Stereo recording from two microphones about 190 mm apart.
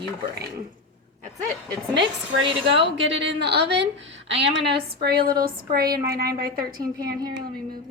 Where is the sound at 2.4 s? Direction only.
30° right (ahead or behind).